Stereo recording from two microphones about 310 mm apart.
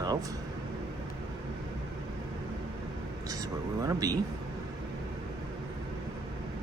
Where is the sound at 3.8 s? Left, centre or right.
Centre.